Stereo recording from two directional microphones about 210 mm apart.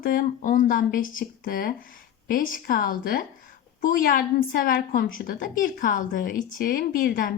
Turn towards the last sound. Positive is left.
turn(degrees=45)  # may be behind; listen again after turning